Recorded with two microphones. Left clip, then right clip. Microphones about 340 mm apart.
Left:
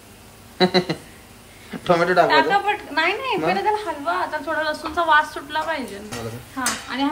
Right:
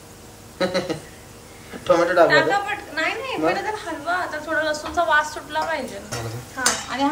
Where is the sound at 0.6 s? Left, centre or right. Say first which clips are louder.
Left 4 dB; left.